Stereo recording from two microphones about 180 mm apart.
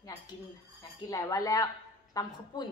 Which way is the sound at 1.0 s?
20° left (ahead or behind).